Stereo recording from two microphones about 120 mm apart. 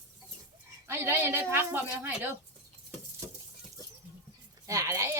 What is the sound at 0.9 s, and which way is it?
Speech, 20° right (ahead or behind).